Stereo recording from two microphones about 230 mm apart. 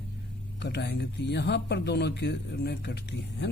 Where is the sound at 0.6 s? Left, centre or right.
Left.